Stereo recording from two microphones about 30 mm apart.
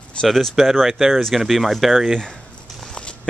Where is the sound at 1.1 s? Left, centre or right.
Centre.